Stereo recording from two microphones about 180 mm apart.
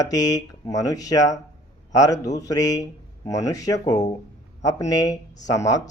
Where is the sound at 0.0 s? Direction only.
20° left (ahead or behind).